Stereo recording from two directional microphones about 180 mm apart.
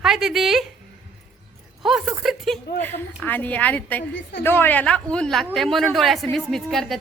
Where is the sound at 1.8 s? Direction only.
Centre (ahead or behind).